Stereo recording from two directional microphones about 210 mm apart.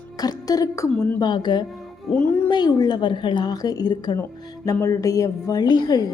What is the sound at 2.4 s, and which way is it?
A woman's voice, 20° left (ahead or behind).